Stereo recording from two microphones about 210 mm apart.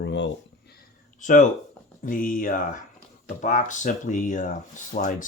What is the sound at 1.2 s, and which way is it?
Speech, 35° left (ahead or behind).